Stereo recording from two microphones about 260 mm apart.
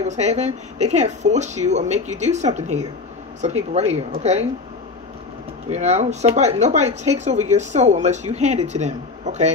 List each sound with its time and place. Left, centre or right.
0.0 s speech: right
5.7 s speech: right